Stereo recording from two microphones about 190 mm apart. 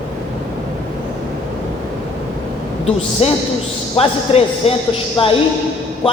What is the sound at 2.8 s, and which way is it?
Speech, 30° left (ahead or behind).